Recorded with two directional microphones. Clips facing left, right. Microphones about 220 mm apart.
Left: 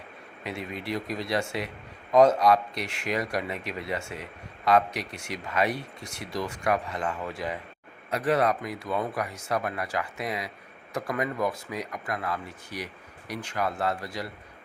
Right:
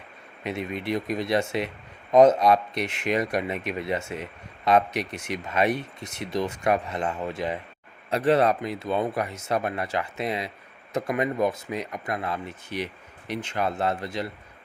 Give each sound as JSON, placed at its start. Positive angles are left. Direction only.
{"t": 0.4, "sound": "speech", "side_deg": -20}